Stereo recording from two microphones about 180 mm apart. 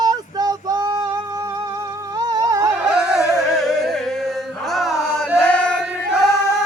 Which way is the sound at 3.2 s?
15° left (ahead or behind).